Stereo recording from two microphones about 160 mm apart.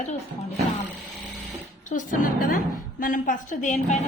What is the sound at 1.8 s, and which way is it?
A woman's voice, 55° left (ahead or behind).